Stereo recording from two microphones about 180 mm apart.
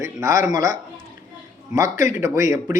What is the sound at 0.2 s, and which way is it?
Speech, 15° right (ahead or behind).